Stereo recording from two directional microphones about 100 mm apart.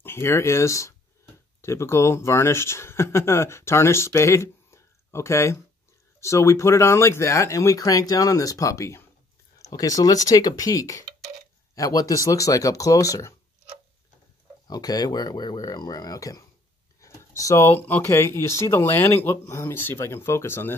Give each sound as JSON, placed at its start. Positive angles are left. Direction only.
{"t": 0.0, "sound": "speech", "side_deg": 25}
{"t": 14.7, "sound": "speech", "side_deg": 40}